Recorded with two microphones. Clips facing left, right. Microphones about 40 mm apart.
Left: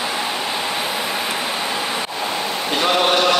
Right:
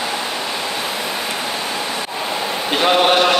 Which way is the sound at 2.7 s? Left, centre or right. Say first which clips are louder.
Right 3 dB; centre.